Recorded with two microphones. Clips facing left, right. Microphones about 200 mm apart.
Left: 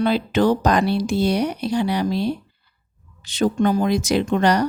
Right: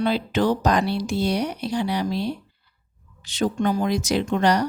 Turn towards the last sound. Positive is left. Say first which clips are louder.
# left 2 dB
turn(degrees=60)  # may be behind; listen again after turning